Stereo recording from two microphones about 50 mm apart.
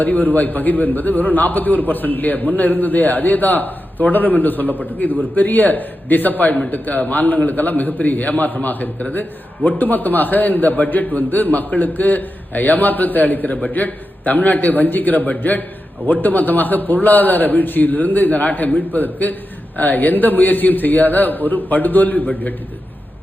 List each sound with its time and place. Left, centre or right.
0.0 s a man's voice: left